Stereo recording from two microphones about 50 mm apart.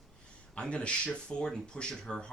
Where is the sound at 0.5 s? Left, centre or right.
Left.